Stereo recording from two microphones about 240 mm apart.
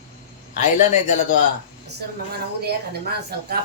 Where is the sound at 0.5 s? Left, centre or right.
Left.